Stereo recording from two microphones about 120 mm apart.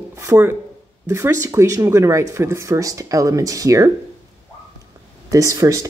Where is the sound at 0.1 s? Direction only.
20° right (ahead or behind).